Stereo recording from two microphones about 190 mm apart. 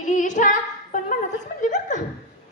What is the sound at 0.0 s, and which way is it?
Female singing, 40° left (ahead or behind).